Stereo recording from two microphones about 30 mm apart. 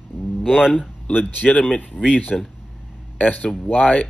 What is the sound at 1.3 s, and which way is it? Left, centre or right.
Speech, left.